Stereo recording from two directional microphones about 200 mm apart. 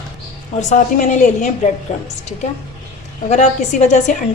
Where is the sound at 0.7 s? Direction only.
40° left (ahead or behind).